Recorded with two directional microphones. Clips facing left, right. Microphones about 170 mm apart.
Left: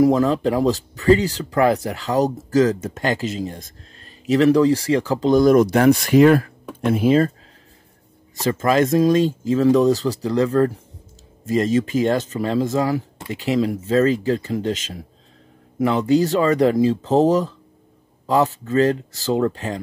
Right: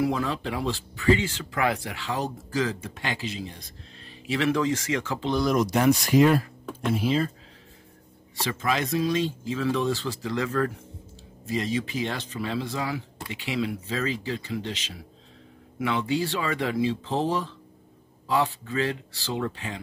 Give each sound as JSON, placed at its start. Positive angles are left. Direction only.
{"t": 0.0, "sound": "speech", "side_deg": 40}
{"t": 8.4, "sound": "speech", "side_deg": 45}
{"t": 11.4, "sound": "speech", "side_deg": 45}